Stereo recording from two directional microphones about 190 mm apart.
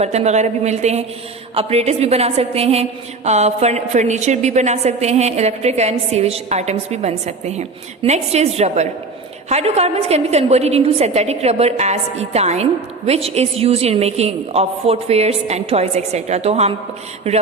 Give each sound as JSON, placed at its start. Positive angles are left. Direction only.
{"t": 0.0, "sound": "a woman's voice", "side_deg": -35}